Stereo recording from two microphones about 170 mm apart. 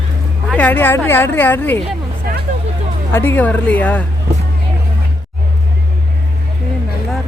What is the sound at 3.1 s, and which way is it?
Speech, 10° left (ahead or behind).